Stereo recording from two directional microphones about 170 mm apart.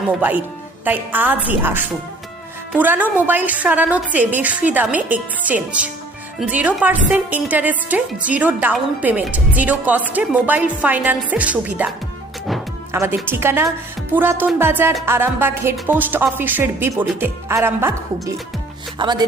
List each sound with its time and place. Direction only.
0.2 s a woman's voice: 10° right (ahead or behind)
12.9 s a woman's voice: 15° right (ahead or behind)
18.9 s speech: 25° right (ahead or behind)